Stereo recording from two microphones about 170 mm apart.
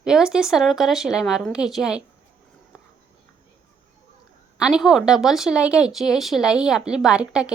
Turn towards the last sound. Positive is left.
turn(degrees=-5)  # may be behind; listen again after turning